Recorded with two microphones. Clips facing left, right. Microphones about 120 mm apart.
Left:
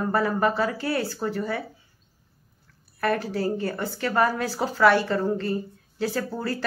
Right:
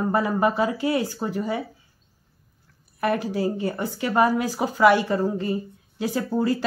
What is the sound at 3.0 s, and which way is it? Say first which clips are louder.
Speech: right 1 dB; 15° right (ahead or behind).